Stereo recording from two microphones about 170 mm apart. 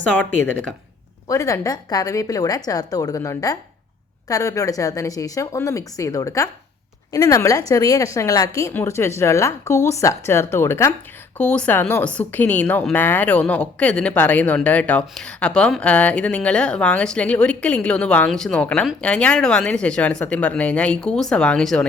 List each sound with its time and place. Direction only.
0.0 s a woman's voice: 10° left (ahead or behind)